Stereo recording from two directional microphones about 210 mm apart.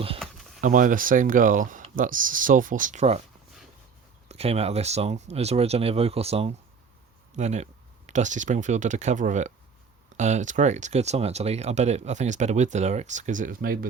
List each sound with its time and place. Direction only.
0.6 s speech: 40° right (ahead or behind)
4.3 s speech: 30° right (ahead or behind)